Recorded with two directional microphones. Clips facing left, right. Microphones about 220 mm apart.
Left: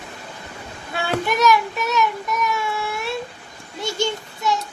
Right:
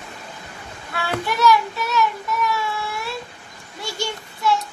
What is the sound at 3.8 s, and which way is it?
Child singing, 20° left (ahead or behind).